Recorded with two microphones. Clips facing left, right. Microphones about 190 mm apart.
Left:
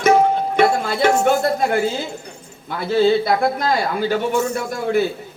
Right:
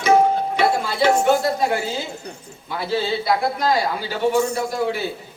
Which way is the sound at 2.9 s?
50° left (ahead or behind).